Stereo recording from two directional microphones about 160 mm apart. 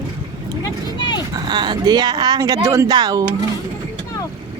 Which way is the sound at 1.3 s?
30° right (ahead or behind).